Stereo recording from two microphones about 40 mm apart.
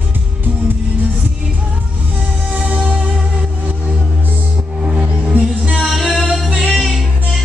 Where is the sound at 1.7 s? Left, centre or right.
Right.